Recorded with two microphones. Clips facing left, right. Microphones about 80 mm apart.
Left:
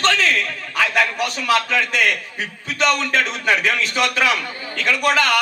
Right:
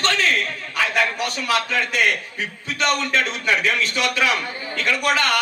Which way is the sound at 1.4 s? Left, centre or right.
Left.